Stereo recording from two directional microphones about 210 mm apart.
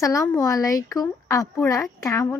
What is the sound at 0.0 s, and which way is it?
A woman's voice, 15° left (ahead or behind).